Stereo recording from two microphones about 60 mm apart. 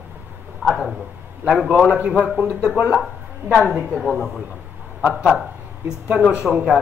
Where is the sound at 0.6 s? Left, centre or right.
Centre.